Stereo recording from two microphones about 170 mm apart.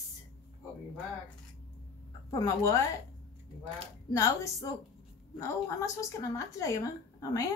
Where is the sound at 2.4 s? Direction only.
20° left (ahead or behind).